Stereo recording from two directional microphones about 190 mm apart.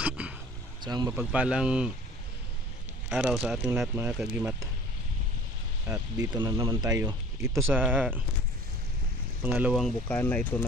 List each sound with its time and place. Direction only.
0.0 s a sound: 5° right (ahead or behind)
0.8 s speech: 20° right (ahead or behind)
1.1 s speech: 5° right (ahead or behind)
3.1 s speech: 5° right (ahead or behind)
5.9 s speech: 20° right (ahead or behind)
9.4 s speech: 10° right (ahead or behind); by 10.6 s 10° left (ahead or behind)